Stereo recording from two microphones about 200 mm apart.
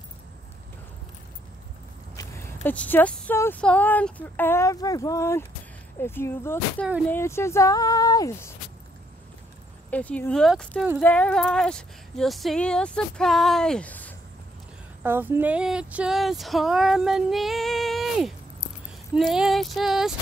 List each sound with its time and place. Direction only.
2.1 s speech: 15° left (ahead or behind)
9.8 s speech: 5° left (ahead or behind)
15.0 s speech: 10° right (ahead or behind)